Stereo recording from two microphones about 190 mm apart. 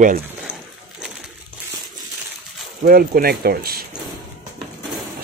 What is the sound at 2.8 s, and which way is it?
Speech, 50° right (ahead or behind).